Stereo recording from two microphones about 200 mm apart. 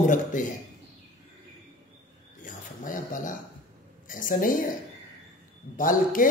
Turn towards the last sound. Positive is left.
turn(degrees=40)  # may be behind; listen again after turning